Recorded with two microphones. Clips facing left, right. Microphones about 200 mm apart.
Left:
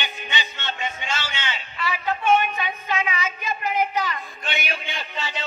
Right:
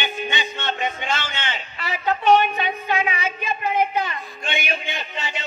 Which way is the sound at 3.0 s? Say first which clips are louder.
Right 2 dB; 30° right (ahead or behind).